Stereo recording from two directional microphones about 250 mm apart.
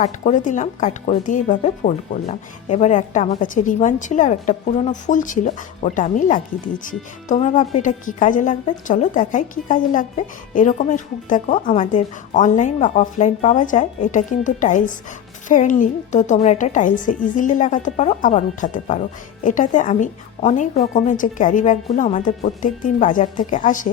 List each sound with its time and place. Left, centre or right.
0.0 s a woman's voice: left